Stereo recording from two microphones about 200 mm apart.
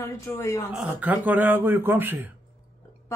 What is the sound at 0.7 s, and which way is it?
Speech, 5° right (ahead or behind).